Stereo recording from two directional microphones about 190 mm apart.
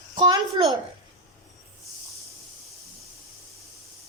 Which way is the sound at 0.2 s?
25° right (ahead or behind).